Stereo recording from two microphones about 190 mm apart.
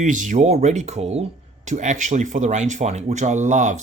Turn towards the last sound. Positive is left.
turn(degrees=-40)  # may be behind; listen again after turning